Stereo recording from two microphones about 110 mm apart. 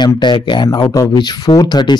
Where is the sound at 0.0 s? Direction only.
45° left (ahead or behind).